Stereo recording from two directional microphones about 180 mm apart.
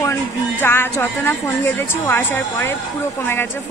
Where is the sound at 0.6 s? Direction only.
10° left (ahead or behind).